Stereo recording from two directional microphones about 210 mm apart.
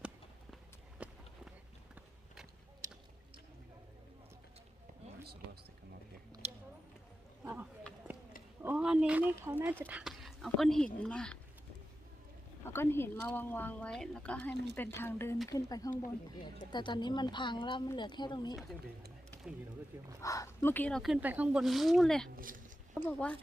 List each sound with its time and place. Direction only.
0.5 s run: 5° right (ahead or behind)
7.4 s speech: 10° right (ahead or behind)
12.6 s a woman's voice: 10° left (ahead or behind)
20.2 s speech: 15° left (ahead or behind)
22.4 s speech: 40° right (ahead or behind)
23.0 s a woman's voice: 5° left (ahead or behind)